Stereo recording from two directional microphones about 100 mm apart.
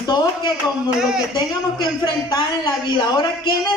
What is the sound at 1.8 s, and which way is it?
A woman's voice, 50° left (ahead or behind).